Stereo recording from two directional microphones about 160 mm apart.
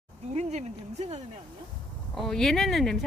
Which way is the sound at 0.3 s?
45° right (ahead or behind).